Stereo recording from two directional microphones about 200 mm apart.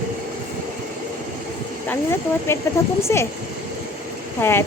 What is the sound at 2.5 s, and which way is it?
Speech, 10° left (ahead or behind).